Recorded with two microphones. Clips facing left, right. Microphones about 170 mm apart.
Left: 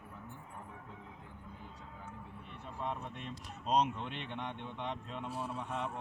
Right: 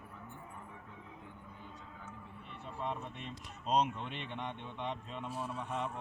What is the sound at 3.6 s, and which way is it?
Speech, centre (ahead or behind).